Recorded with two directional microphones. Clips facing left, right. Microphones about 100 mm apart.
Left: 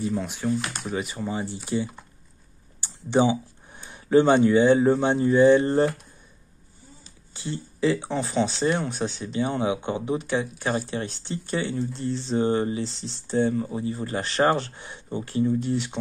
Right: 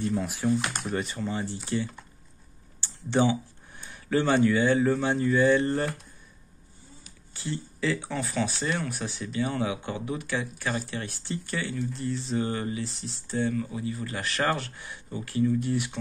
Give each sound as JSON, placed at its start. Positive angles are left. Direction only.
{"t": 0.0, "sound": "speech", "side_deg": 0}
{"t": 7.3, "sound": "speech", "side_deg": 20}